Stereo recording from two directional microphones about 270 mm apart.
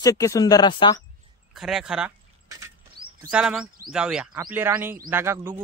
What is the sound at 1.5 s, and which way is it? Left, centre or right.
Speech, centre.